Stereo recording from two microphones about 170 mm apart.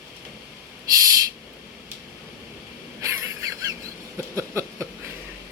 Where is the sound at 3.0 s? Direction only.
20° right (ahead or behind).